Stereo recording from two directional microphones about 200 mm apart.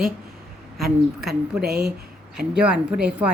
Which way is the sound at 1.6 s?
55° right (ahead or behind).